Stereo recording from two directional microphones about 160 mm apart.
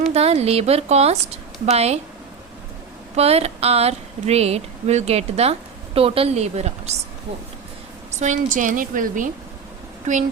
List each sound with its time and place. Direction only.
0.1 s speech: 40° right (ahead or behind)
3.2 s speech: 40° right (ahead or behind)
8.2 s a woman's voice: 50° right (ahead or behind)